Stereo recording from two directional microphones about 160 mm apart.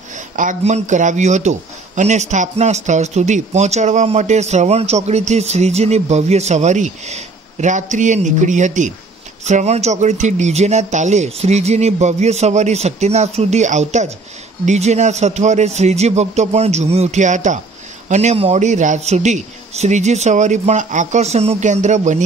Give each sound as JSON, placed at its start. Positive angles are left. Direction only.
{"t": 0.1, "sound": "speech", "side_deg": -55}